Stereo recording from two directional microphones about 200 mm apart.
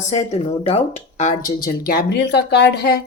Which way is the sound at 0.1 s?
35° left (ahead or behind).